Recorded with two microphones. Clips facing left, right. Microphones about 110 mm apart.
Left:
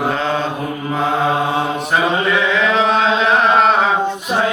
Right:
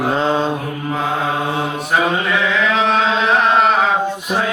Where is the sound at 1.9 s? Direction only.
Centre (ahead or behind).